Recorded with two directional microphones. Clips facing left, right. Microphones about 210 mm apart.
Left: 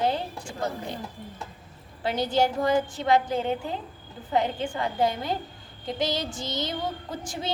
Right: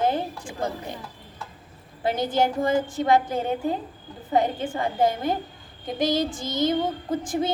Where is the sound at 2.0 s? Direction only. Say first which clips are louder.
Right 1 dB; 50° right (ahead or behind).